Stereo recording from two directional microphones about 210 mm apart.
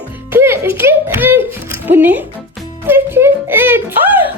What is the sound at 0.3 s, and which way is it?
Music, 10° right (ahead or behind).